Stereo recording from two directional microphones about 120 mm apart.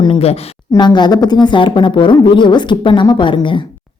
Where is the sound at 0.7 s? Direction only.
40° left (ahead or behind).